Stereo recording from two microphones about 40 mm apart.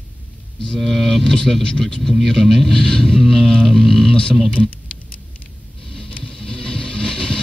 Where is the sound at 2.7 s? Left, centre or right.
Centre.